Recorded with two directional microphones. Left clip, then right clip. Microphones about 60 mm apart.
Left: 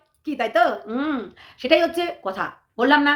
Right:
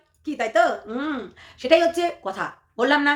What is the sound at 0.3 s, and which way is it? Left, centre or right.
A woman's voice, left.